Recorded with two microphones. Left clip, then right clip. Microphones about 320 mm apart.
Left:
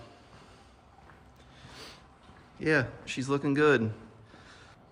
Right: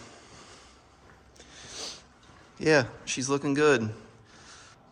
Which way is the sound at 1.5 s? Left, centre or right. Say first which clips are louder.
Right 8 dB; centre.